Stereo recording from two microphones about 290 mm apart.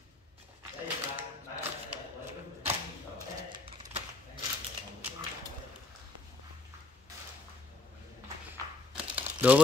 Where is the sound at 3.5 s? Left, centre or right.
Centre.